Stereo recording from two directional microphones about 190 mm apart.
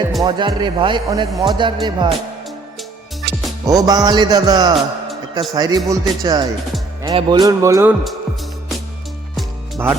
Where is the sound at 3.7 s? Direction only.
20° right (ahead or behind).